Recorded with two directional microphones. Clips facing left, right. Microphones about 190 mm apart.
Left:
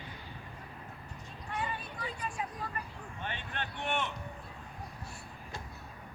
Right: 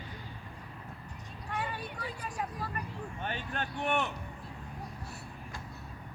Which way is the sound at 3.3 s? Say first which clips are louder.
Right 3 dB; 45° right (ahead or behind).